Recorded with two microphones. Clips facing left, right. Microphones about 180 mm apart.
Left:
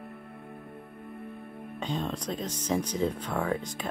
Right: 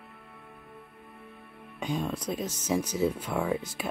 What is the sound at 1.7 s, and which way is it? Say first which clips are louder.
Music: right 1 dB; 10° right (ahead or behind).